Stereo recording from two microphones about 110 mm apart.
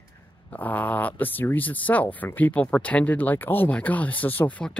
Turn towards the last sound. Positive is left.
turn(degrees=10)  # may be behind; listen again after turning